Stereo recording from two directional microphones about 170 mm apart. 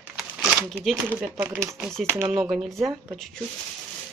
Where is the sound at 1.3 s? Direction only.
15° right (ahead or behind).